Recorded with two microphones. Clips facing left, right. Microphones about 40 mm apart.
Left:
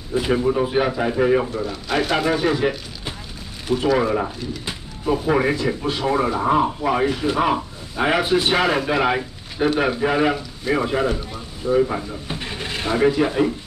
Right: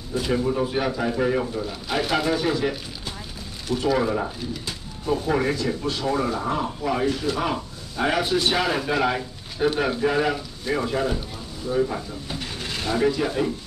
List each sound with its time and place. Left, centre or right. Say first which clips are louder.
0.1 s speech: left 4 dB; left
1.7 s speech: left 4 dB; centre
2.2 s speech: left 3 dB; centre
11.6 s a sound: left 5 dB; left